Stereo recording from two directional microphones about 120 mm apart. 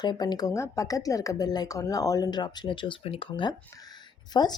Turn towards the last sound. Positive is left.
turn(degrees=35)  # may be behind; listen again after turning